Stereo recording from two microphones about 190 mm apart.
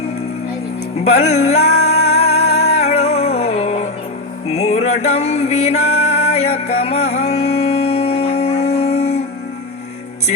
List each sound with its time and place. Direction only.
0.9 s music: 35° left (ahead or behind)